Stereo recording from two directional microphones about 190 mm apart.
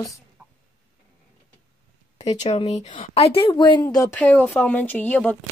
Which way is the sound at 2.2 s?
35° left (ahead or behind).